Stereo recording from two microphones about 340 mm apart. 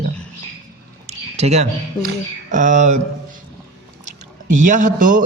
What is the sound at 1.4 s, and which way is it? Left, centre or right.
A man's voice, centre.